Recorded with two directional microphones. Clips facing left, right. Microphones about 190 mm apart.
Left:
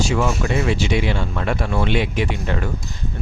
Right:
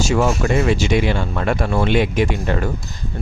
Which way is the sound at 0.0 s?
45° right (ahead or behind).